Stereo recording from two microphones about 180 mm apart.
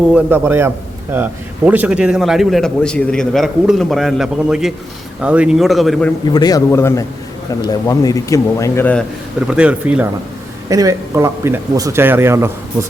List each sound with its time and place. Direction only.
0.1 s a man's voice: 10° right (ahead or behind)
6.3 s speech: 20° left (ahead or behind)
9.5 s speech: 5° right (ahead or behind)
10.7 s speech: 20° right (ahead or behind)